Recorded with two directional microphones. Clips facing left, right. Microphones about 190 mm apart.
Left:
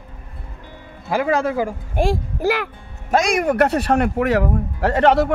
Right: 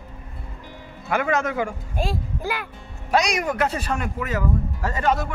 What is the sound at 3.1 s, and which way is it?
Speech, 50° left (ahead or behind).